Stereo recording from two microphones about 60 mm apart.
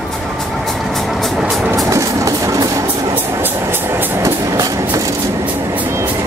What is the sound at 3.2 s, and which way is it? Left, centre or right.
Train, right.